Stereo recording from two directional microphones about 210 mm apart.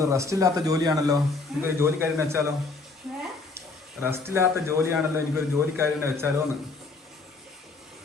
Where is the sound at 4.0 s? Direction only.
10° right (ahead or behind).